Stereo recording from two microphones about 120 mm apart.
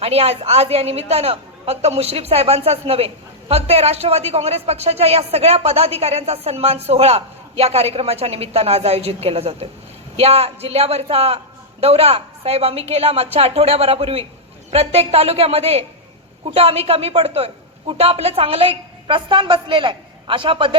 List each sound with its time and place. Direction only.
0.0 s a woman's voice: 55° right (ahead or behind)